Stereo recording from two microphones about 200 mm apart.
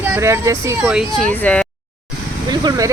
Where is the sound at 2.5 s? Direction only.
20° right (ahead or behind).